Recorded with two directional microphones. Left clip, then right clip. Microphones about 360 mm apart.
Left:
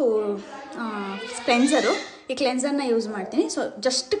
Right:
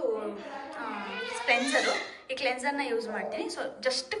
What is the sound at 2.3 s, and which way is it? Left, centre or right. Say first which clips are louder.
A woman's voice: left 6 dB; centre.